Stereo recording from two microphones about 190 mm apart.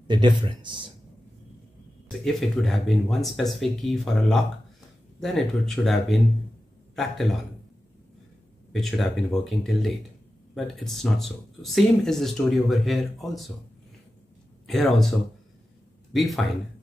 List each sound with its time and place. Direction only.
0.1 s speech: 25° right (ahead or behind)
2.0 s speech: centre (ahead or behind)
8.7 s speech: centre (ahead or behind)
14.7 s speech: centre (ahead or behind)